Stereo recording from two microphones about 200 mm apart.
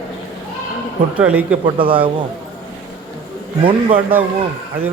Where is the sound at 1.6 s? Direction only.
25° right (ahead or behind).